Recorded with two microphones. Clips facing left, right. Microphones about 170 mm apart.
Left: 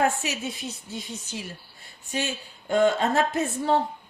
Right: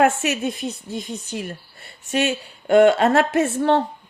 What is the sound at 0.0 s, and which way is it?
A woman's voice, 70° right (ahead or behind).